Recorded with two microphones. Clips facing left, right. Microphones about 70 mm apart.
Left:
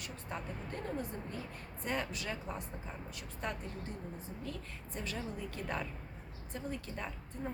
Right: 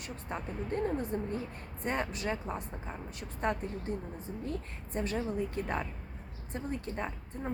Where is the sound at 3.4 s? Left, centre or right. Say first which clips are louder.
Right 8 dB; right.